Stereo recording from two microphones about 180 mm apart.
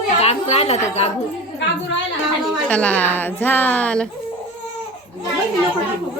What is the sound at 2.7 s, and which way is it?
Speech, 10° left (ahead or behind).